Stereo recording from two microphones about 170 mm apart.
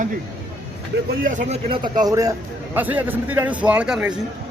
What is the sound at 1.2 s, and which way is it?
Speech, 50° right (ahead or behind).